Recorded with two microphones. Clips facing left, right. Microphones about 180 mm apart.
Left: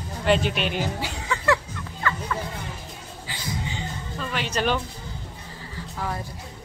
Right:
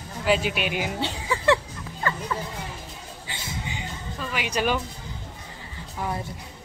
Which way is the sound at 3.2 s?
20° right (ahead or behind).